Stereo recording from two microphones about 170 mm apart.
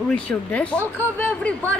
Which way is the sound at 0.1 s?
5° left (ahead or behind).